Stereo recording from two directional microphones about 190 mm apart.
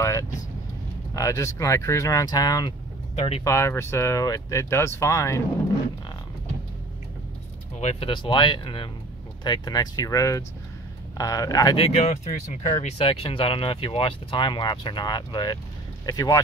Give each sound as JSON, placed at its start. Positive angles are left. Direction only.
{"t": 0.0, "sound": "speech", "side_deg": 15}
{"t": 3.2, "sound": "speech", "side_deg": 30}
{"t": 3.4, "sound": "speech", "side_deg": 15}
{"t": 7.8, "sound": "speech", "side_deg": 30}